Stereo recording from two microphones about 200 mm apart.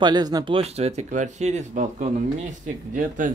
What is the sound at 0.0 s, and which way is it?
Speech, 20° right (ahead or behind).